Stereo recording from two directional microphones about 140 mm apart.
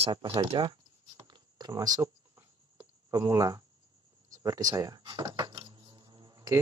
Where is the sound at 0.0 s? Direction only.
35° right (ahead or behind).